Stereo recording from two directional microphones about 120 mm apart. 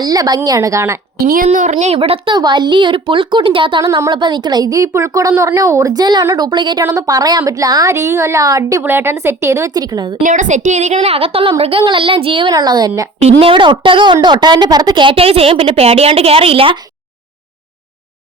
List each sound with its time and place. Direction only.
0.0 s a woman's voice: 35° right (ahead or behind)
1.5 s a woman's voice: 85° right
2.0 s a woman's voice: 50° right (ahead or behind)
3.8 s a woman's voice: 25° right (ahead or behind)
4.1 s a woman's voice: 40° right (ahead or behind)
6.8 s a woman's voice: 25° right (ahead or behind)
8.8 s a woman's voice: 20° right (ahead or behind); by 10.2 s 35° right (ahead or behind)
10.2 s a woman's voice: 90° right; by 12.5 s 45° right (ahead or behind)
12.5 s a woman's voice: 35° right (ahead or behind); by 16.7 s 50° right (ahead or behind)